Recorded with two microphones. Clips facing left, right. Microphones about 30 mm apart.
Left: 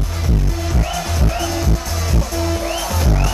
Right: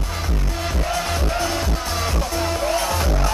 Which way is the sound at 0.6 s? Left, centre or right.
Right.